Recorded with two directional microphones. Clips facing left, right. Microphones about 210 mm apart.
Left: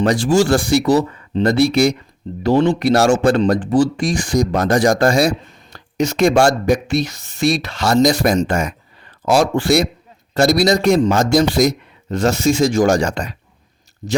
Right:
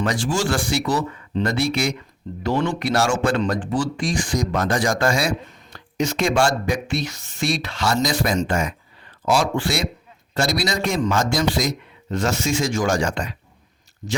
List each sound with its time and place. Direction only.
0.0 s speech: 35° left (ahead or behind)